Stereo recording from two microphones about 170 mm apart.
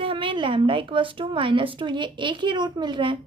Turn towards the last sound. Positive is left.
turn(degrees=-30)  # may be behind; listen again after turning